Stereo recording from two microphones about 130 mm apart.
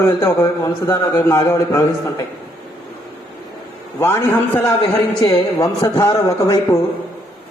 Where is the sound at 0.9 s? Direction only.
20° left (ahead or behind).